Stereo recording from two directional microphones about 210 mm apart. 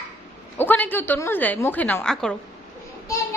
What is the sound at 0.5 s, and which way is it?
A woman's voice, 10° left (ahead or behind).